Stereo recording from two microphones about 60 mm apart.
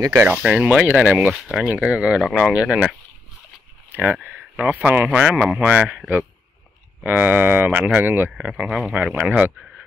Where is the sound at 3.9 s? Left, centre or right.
Right.